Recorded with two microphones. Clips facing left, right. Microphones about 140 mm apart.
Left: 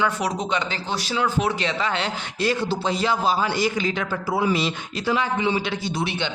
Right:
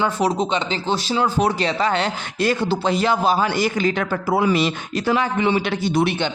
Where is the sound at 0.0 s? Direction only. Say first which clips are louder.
Right 4 dB; 30° right (ahead or behind); by 6.3 s 50° right (ahead or behind).